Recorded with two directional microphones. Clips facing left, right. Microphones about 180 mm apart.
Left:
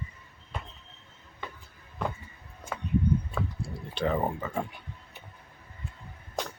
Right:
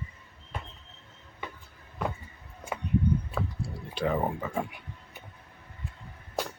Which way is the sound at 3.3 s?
5° right (ahead or behind).